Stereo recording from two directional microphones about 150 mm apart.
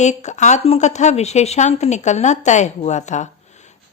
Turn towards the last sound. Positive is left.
turn(degrees=50)  # may be behind; listen again after turning